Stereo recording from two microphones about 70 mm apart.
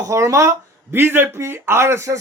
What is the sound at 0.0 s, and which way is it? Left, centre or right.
A man's voice, right.